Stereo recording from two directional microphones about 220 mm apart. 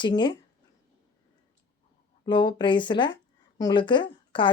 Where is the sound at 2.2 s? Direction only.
20° left (ahead or behind).